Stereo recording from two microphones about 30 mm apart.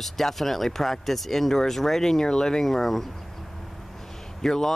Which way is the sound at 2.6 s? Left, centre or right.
Centre.